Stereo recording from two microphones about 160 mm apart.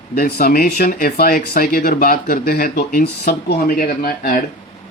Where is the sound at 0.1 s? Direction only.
65° left (ahead or behind).